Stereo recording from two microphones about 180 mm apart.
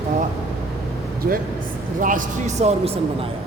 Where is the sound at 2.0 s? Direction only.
45° right (ahead or behind).